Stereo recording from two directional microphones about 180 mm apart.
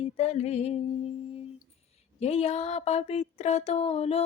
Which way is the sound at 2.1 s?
35° left (ahead or behind).